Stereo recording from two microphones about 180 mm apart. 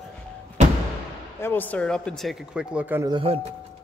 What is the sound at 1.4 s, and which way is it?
Speech, 10° left (ahead or behind).